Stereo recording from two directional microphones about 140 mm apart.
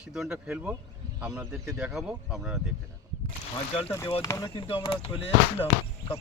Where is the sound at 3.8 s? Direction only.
20° left (ahead or behind).